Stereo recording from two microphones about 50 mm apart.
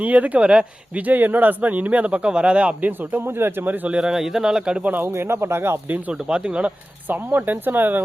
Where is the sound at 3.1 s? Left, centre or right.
Right.